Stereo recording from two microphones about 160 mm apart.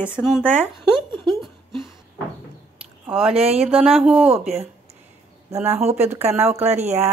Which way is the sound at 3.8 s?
Centre (ahead or behind).